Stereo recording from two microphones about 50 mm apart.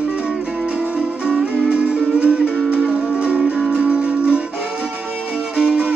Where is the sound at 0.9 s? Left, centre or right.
Centre.